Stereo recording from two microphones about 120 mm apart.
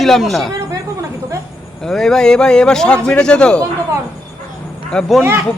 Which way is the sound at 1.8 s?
5° left (ahead or behind).